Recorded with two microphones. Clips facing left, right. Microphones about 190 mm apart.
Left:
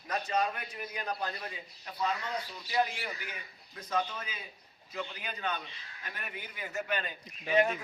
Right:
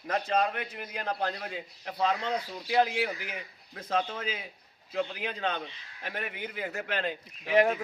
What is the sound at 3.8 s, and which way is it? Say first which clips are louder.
Speech: right 3 dB; 55° right (ahead or behind).